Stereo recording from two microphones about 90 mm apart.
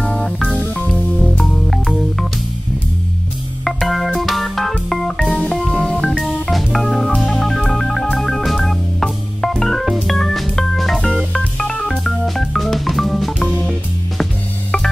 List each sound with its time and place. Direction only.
0.0 s music: 10° left (ahead or behind)
1.4 s music: 5° left (ahead or behind)
3.6 s organ: centre (ahead or behind)
7.2 s music: centre (ahead or behind)